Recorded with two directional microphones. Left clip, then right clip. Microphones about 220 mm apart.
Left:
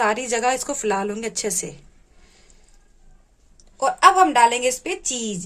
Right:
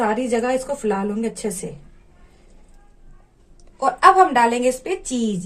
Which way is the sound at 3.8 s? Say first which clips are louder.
Right 1 dB; 35° left (ahead or behind).